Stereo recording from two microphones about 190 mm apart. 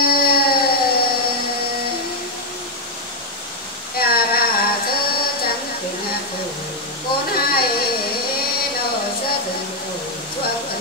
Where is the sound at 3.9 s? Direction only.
50° left (ahead or behind).